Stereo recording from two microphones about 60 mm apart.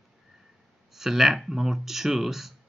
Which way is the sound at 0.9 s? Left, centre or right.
Centre.